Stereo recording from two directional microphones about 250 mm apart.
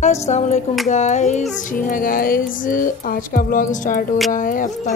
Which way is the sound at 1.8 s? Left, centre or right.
Left.